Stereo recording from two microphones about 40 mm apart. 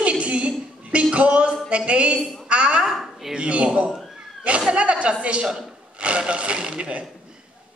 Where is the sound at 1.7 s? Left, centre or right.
Right.